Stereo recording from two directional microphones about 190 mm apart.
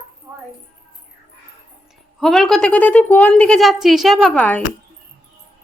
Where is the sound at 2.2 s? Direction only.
Centre (ahead or behind).